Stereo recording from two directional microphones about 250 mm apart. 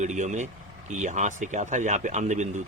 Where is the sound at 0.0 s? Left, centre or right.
Right.